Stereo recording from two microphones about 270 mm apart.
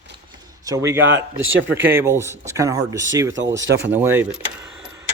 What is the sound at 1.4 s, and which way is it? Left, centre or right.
Speech, right.